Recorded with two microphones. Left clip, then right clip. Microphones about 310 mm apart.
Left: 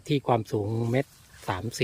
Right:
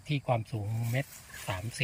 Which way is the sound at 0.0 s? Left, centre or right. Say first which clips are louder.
Left 7 dB; centre.